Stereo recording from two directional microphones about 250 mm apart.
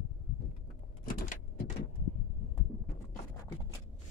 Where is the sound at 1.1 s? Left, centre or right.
Left.